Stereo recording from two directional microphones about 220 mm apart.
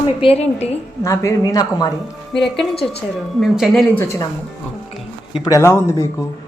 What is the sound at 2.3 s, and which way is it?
Speech, centre (ahead or behind).